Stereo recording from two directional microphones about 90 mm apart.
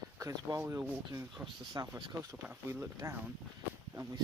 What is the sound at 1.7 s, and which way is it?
Speech, 60° right (ahead or behind).